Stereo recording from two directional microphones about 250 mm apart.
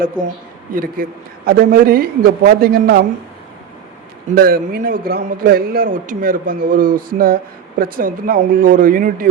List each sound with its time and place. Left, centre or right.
0.7 s a man's voice: right
4.4 s a man's voice: right